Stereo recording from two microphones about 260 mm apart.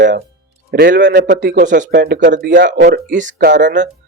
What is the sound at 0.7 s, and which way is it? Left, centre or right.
Speech, right.